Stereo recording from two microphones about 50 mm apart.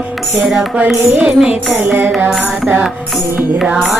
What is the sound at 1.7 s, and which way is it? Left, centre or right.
Music, right.